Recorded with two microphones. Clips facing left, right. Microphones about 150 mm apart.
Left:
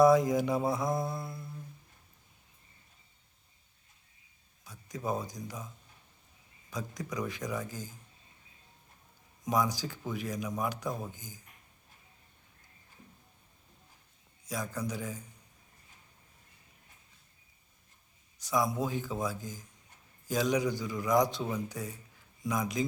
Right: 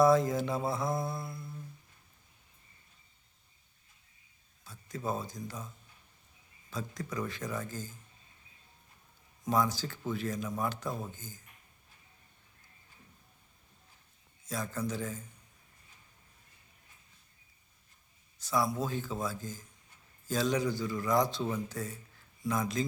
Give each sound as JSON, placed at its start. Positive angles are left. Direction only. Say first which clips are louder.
{"t": 0.0, "sound": "speech", "louder": "left 2 dB", "side_deg": 15}
{"t": 4.6, "sound": "speech", "louder": "left 1 dB", "side_deg": 15}
{"t": 6.7, "sound": "speech", "louder": "even", "side_deg": 15}
{"t": 9.5, "sound": "speech", "louder": "even", "side_deg": 15}
{"t": 14.4, "sound": "speech", "louder": "even", "side_deg": 15}
{"t": 18.3, "sound": "speech", "louder": "left 1 dB", "side_deg": 15}